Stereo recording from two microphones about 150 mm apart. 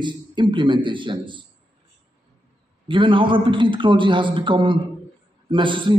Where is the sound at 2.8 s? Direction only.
35° right (ahead or behind).